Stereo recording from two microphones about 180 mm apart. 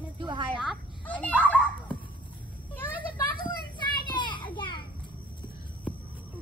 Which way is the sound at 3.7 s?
25° left (ahead or behind).